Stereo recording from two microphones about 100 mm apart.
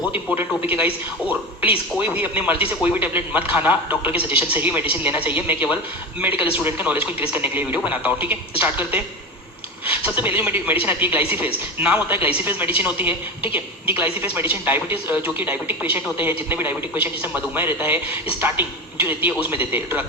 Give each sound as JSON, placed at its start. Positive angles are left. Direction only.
{"t": 0.0, "sound": "a woman's voice", "side_deg": -10}